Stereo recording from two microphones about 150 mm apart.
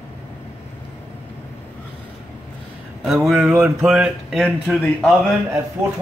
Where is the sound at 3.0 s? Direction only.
Centre (ahead or behind).